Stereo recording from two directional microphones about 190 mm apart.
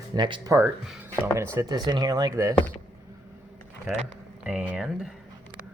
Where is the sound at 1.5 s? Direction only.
20° right (ahead or behind).